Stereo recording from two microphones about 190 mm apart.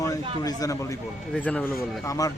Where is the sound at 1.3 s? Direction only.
5° left (ahead or behind).